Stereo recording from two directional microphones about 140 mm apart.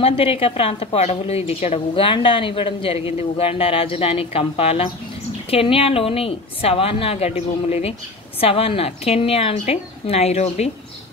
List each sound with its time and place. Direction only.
0.0 s a woman's voice: 45° left (ahead or behind)